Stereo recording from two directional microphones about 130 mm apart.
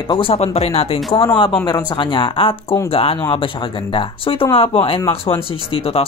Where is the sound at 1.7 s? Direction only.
35° left (ahead or behind).